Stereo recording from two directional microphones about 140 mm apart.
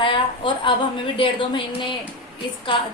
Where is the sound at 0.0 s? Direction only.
35° left (ahead or behind).